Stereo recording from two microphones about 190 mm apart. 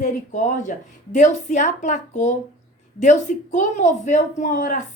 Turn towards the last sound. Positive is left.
turn(degrees=45)  # may be behind; listen again after turning